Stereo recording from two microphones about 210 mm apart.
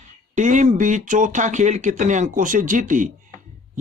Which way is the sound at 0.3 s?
35° right (ahead or behind).